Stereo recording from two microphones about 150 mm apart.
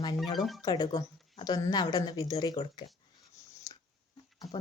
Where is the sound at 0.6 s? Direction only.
30° left (ahead or behind).